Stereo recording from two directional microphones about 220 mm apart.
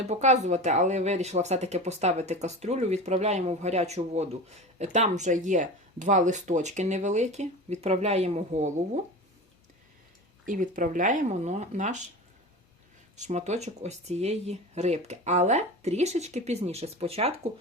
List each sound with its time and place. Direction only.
0.0 s speech: 30° right (ahead or behind)
10.4 s speech: 35° right (ahead or behind)
13.1 s speech: 30° right (ahead or behind)